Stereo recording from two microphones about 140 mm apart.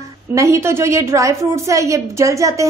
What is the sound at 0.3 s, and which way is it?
A woman's voice, 20° right (ahead or behind).